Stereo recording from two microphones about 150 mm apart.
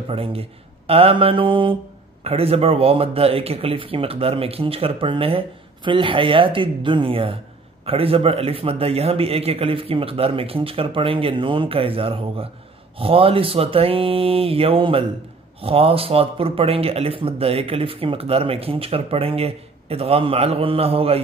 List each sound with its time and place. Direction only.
0.1 s speech: 40° right (ahead or behind)